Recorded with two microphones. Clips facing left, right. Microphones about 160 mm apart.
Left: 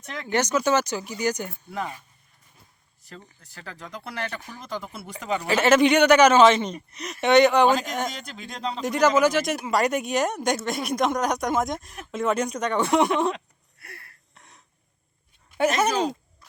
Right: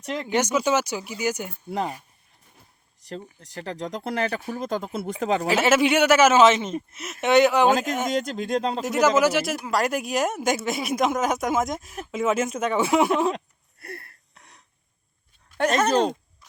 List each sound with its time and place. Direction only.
0.3 s speech: 10° right (ahead or behind)
1.7 s speech: 35° right (ahead or behind)
3.4 s speech: 40° right (ahead or behind)
5.5 s speech: 5° right (ahead or behind)
8.4 s speech: 45° right (ahead or behind)
8.8 s speech: 5° right (ahead or behind)
13.3 s a sound: 40° right (ahead or behind)
14.3 s throat clearing: centre (ahead or behind)
15.5 s speech: 10° left (ahead or behind)